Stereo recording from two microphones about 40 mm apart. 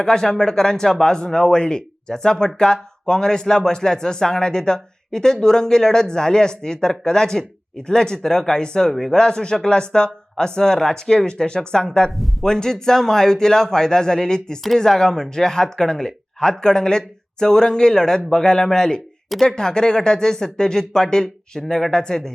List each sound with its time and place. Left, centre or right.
0.0 s speech: centre